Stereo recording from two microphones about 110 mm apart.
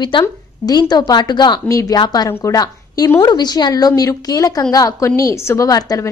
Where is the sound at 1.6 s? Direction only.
30° left (ahead or behind).